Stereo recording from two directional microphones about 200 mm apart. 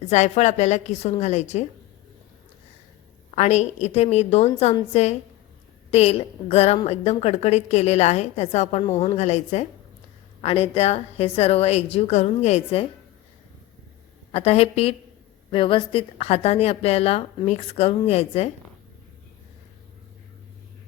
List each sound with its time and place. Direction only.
0.1 s a woman's voice: 35° left (ahead or behind)
3.3 s a woman's voice: 35° left (ahead or behind)
14.3 s a woman's voice: 30° left (ahead or behind)